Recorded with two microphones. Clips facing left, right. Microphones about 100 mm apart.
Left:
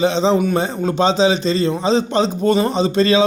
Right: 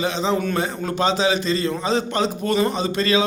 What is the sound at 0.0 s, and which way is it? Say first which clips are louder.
A man's voice: left 6 dB; 30° left (ahead or behind).